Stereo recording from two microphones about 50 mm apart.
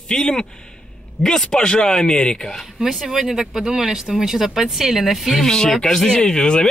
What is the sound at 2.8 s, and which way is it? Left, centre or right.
A woman's voice, centre.